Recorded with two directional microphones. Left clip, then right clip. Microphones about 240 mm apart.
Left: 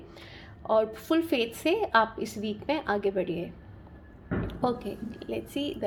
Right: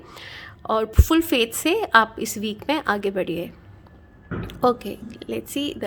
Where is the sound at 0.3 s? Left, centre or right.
Right.